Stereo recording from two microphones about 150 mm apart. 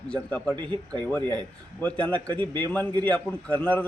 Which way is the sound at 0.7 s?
30° right (ahead or behind).